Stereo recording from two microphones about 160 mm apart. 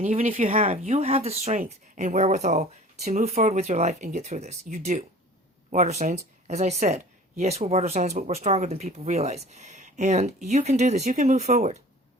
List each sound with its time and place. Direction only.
0.0 s speech: 50° right (ahead or behind)